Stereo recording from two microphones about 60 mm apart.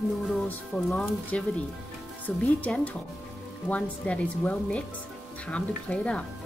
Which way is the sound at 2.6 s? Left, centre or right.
Left.